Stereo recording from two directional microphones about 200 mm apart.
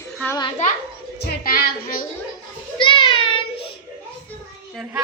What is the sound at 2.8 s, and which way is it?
Child singing, 25° left (ahead or behind).